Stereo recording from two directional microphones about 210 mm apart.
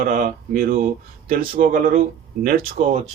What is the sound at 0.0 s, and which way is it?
Speech, 40° right (ahead or behind).